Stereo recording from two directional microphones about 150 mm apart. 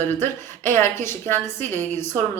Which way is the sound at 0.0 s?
15° left (ahead or behind).